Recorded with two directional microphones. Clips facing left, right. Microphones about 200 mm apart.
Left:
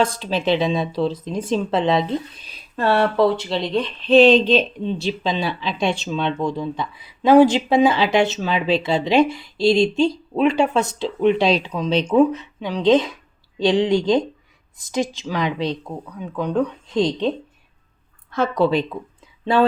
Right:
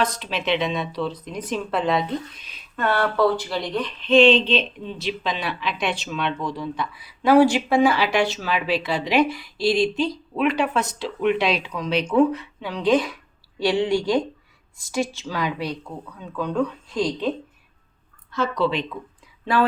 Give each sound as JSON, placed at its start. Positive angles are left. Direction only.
{"t": 0.0, "sound": "speech", "side_deg": 30}
{"t": 4.9, "sound": "speech", "side_deg": 25}
{"t": 18.3, "sound": "a woman's voice", "side_deg": 55}
{"t": 19.5, "sound": "speech", "side_deg": 25}